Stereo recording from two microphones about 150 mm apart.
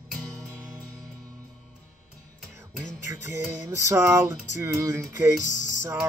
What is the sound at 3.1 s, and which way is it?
Music, 20° right (ahead or behind).